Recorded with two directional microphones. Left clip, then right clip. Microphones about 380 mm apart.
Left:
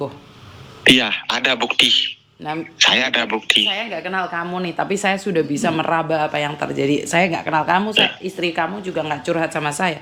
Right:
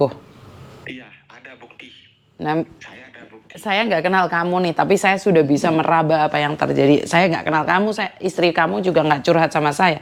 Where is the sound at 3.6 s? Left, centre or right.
Right.